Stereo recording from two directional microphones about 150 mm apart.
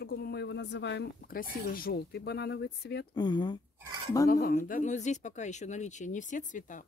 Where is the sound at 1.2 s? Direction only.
75° left (ahead or behind); by 3.1 s 90° left.